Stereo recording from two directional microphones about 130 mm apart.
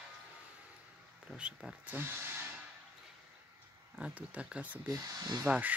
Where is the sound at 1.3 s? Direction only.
5° right (ahead or behind).